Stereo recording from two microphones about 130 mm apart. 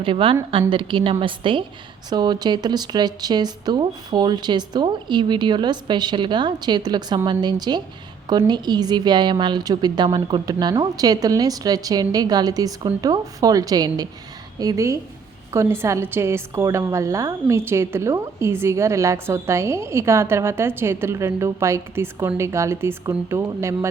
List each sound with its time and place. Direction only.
0.0 s a woman's voice: 45° right (ahead or behind); by 23.9 s 20° right (ahead or behind)